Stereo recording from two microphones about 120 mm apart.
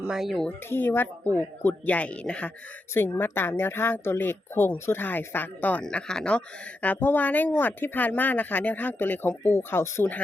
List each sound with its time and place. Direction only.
0.1 s speech: centre (ahead or behind)
0.7 s speech: 15° left (ahead or behind)